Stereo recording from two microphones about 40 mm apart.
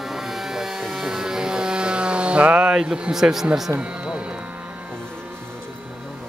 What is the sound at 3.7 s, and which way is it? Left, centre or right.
Speech, right.